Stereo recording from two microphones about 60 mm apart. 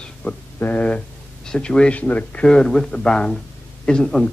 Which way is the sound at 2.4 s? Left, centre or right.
Centre.